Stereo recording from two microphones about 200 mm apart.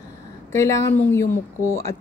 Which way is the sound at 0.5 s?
15° left (ahead or behind).